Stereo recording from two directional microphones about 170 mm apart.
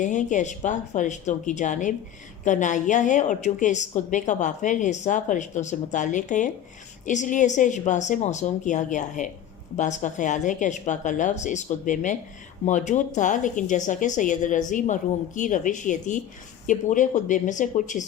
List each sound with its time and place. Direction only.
0.0 s a woman's voice: 45° left (ahead or behind)